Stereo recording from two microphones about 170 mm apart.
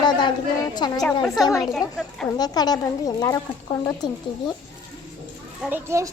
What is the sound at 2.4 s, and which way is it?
A child's voice, 25° left (ahead or behind).